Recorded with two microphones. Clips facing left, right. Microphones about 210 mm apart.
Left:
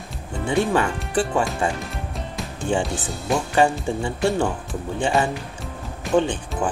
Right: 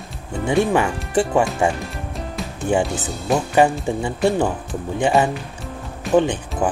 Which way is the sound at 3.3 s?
Centre (ahead or behind).